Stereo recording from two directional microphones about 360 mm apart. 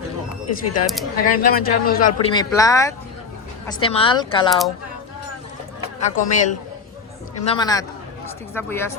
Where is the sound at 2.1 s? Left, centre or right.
Centre.